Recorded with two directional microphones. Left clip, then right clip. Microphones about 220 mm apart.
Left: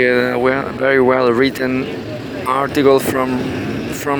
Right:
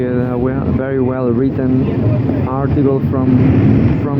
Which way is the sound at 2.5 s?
50° left (ahead or behind).